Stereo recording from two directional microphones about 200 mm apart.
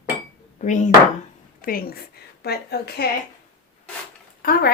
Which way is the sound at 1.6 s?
45° left (ahead or behind).